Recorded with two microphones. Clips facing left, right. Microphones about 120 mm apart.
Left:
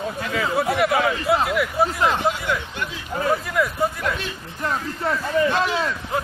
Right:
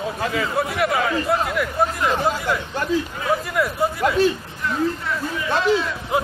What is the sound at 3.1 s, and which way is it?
Speech, 40° left (ahead or behind).